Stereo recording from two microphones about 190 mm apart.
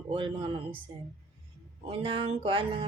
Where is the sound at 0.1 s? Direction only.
25° right (ahead or behind).